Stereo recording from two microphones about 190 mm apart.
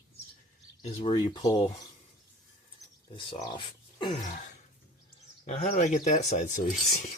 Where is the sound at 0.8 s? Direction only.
30° left (ahead or behind).